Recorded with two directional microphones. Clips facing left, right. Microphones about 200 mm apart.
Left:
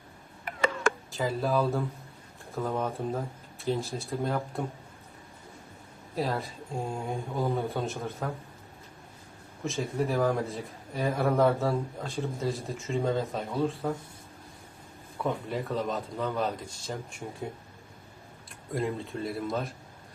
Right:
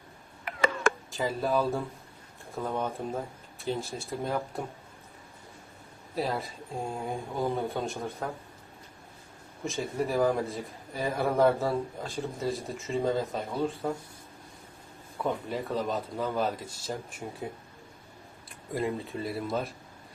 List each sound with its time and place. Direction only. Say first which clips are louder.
1.1 s a man's voice: left 2 dB; centre (ahead or behind)
6.1 s a man's voice: even; centre (ahead or behind)
9.6 s a man's voice: left 1 dB; centre (ahead or behind)
15.2 s a man's voice: even; centre (ahead or behind)
18.7 s a man's voice: even; centre (ahead or behind)